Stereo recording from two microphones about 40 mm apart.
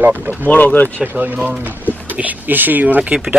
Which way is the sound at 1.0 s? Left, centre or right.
Right.